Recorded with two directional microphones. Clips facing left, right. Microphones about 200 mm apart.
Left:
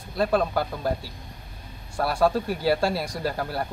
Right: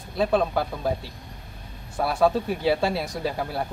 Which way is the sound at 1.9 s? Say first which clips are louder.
Right 1 dB; centre (ahead or behind).